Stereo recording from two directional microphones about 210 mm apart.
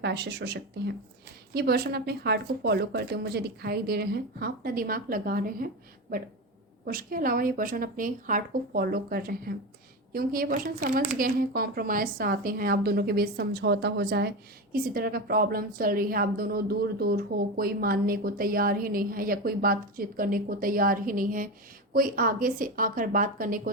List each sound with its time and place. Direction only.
0.0 s a woman's voice: 50° right (ahead or behind)